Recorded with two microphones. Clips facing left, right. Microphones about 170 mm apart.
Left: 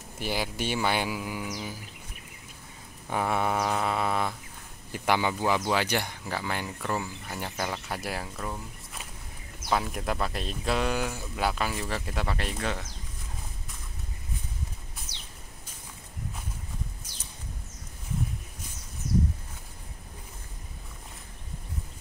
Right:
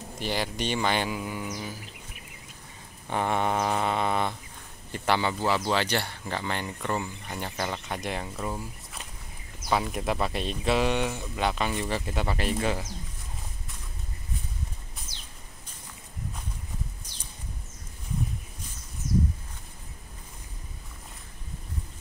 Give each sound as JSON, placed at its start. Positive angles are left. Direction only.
{"t": 0.2, "sound": "speech", "side_deg": 10}
{"t": 3.1, "sound": "speech", "side_deg": 5}